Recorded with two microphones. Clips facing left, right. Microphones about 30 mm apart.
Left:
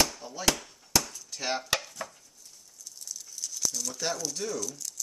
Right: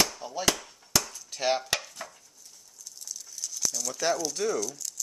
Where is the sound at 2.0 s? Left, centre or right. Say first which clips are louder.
Left 1 dB; centre.